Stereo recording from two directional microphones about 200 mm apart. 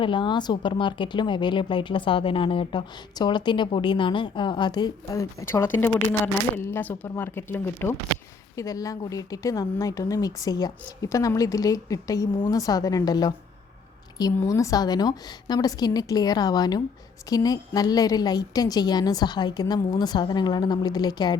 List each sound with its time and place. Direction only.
0.0 s speech: 25° left (ahead or behind)